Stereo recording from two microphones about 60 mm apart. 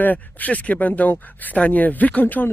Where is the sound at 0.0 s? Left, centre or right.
Left.